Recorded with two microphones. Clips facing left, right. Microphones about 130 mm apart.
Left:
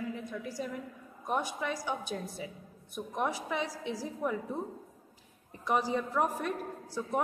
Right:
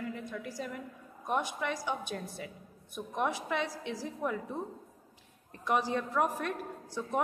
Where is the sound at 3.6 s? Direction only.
50° right (ahead or behind).